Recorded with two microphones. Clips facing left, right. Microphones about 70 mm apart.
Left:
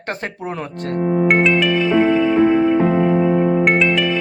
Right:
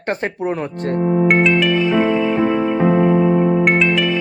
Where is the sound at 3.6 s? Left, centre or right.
Centre.